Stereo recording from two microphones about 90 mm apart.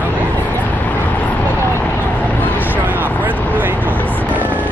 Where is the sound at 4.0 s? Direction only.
20° left (ahead or behind).